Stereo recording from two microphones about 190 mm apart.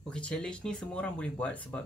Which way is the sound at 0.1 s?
5° left (ahead or behind).